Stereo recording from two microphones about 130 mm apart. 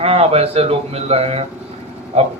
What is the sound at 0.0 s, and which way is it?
Speech, 50° right (ahead or behind).